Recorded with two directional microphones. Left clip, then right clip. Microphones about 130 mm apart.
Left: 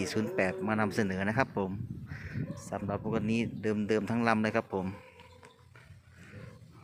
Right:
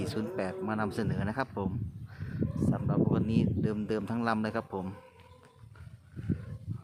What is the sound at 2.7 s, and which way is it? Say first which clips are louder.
A man's voice: even; 15° left (ahead or behind).